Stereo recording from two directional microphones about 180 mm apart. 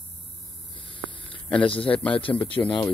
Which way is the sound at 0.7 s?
30° left (ahead or behind).